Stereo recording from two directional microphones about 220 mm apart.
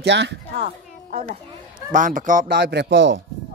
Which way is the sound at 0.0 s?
50° right (ahead or behind).